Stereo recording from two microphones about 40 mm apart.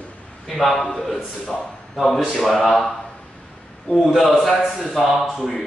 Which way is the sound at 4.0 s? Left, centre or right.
Centre.